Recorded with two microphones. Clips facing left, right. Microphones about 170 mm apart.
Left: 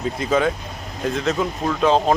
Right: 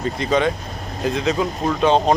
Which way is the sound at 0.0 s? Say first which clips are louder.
Right 1 dB; 5° left (ahead or behind).